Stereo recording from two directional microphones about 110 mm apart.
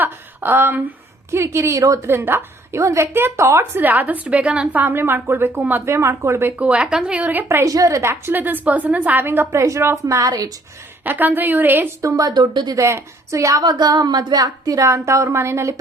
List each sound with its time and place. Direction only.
0.0 s a woman's voice: 20° right (ahead or behind)
6.6 s a woman's voice: 10° right (ahead or behind); by 10.5 s 35° right (ahead or behind)
11.0 s a woman's voice: 15° right (ahead or behind)
12.0 s a woman's voice: 35° right (ahead or behind)